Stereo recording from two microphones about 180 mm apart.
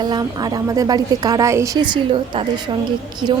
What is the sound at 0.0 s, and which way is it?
A woman's voice, 20° right (ahead or behind).